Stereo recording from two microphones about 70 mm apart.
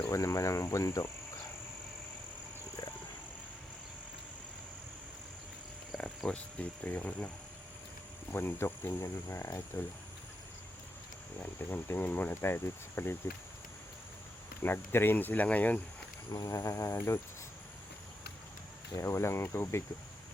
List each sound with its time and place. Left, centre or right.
0.1 s speech: left
6.0 s speech: centre
8.3 s speech: left
11.7 s speech: left
14.6 s speech: left
16.3 s speech: left
18.9 s speech: left